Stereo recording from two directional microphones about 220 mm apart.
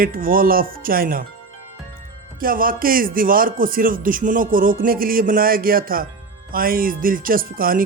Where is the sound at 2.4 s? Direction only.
40° right (ahead or behind).